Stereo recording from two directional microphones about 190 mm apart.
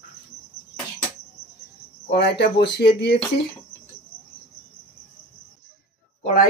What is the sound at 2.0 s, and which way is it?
Speech, 60° left (ahead or behind).